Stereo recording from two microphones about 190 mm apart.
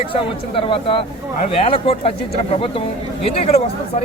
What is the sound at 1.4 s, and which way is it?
Speech, 35° left (ahead or behind).